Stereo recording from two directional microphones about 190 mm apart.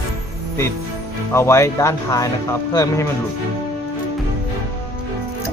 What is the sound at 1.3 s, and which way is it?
Speech, 15° left (ahead or behind).